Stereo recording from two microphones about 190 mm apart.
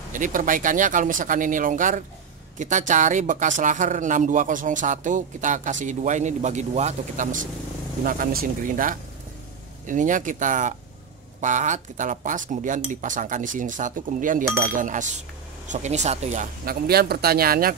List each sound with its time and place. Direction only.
0.1 s speech: 45° right (ahead or behind)